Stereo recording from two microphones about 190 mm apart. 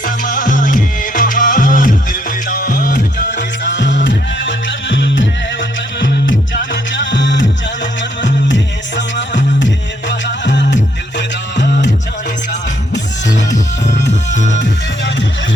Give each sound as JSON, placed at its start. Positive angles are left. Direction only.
{"t": 0.0, "sound": "music", "side_deg": 45}
{"t": 3.2, "sound": "music", "side_deg": 70}
{"t": 14.1, "sound": "music", "side_deg": 40}